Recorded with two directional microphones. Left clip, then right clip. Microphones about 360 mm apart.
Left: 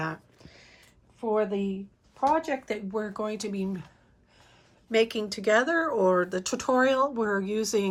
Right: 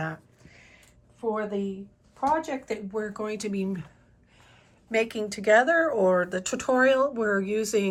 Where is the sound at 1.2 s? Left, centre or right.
Centre.